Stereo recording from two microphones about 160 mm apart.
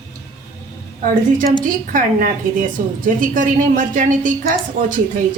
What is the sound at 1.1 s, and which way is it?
A woman's voice, 60° right (ahead or behind).